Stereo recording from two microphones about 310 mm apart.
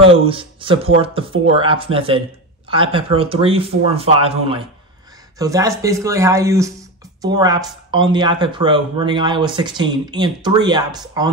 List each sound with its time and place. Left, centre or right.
0.3 s speech: centre